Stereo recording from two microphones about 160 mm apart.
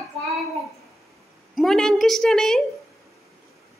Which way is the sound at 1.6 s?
Centre (ahead or behind).